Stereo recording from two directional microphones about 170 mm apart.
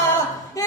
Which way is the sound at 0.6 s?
20° left (ahead or behind).